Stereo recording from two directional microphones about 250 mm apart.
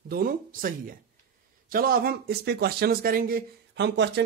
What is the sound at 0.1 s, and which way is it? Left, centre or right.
A man's voice, right.